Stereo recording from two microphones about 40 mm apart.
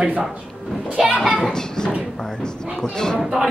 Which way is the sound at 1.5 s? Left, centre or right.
Centre.